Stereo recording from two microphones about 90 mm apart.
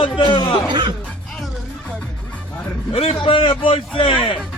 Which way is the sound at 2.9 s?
90° left.